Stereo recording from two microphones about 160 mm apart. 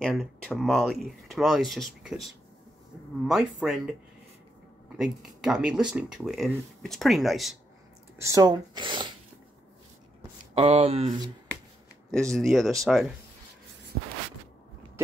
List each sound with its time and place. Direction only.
0.0 s speech: 5° left (ahead or behind)
4.9 s speech: 5° right (ahead or behind)
8.2 s speech: 20° right (ahead or behind)
10.5 s speech: 40° right (ahead or behind)
12.1 s speech: 5° left (ahead or behind)